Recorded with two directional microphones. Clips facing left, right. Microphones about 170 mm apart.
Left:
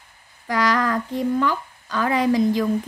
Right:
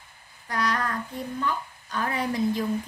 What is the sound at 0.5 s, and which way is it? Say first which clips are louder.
Speech: left 7 dB; 90° left.